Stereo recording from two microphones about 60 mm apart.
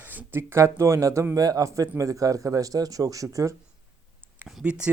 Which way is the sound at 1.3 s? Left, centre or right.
Right.